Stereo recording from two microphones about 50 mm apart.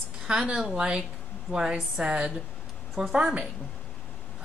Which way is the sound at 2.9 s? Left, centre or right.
Centre.